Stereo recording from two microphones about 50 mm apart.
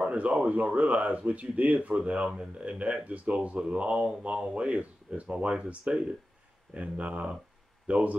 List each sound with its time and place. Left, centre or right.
0.0 s speech: right